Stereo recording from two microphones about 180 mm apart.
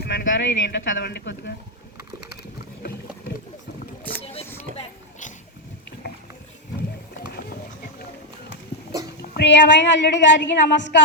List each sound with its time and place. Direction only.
0.0 s speech: 65° left (ahead or behind)
4.2 s a sound: 35° left (ahead or behind)
9.3 s a woman's voice: 75° left (ahead or behind)